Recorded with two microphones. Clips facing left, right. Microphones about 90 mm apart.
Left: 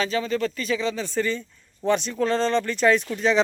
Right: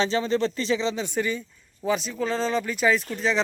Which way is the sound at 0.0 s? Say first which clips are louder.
Right 1 dB; 25° right (ahead or behind).